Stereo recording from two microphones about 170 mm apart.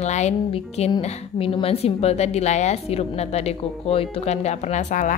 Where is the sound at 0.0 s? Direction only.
40° left (ahead or behind).